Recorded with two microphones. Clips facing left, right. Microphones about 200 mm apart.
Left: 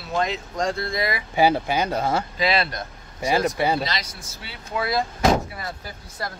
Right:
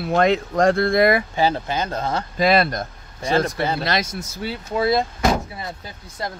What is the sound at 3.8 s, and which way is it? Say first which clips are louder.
Speech: right 8 dB; 50° right (ahead or behind).